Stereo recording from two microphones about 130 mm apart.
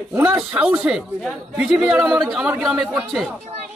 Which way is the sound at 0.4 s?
10° right (ahead or behind).